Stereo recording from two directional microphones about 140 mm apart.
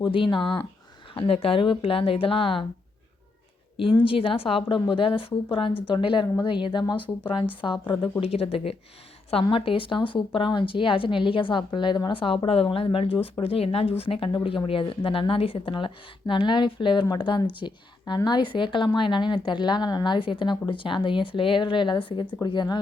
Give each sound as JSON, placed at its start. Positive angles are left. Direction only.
{"t": 0.0, "sound": "a woman's voice", "side_deg": 35}
{"t": 4.0, "sound": "a woman's voice", "side_deg": 40}